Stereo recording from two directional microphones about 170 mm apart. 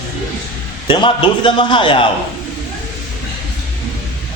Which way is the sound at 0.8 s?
30° left (ahead or behind).